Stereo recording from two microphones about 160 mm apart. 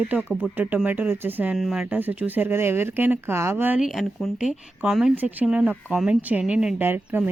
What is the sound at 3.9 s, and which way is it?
Speech, centre (ahead or behind).